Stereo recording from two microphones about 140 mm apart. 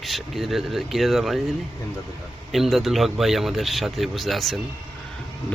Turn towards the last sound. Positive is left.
turn(degrees=0)  # may be behind; listen again after turning